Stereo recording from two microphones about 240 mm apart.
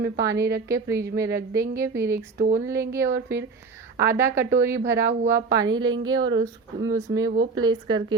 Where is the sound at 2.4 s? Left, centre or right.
Right.